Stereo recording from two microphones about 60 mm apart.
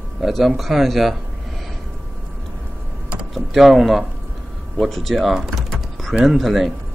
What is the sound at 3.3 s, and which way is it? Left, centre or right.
Speech, centre.